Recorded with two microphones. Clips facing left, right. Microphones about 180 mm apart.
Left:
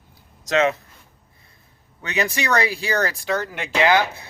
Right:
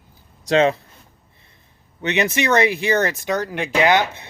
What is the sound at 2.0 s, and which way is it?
Speech, 20° right (ahead or behind).